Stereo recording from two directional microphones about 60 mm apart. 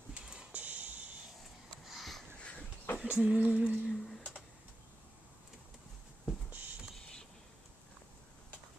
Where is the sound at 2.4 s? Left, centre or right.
Left.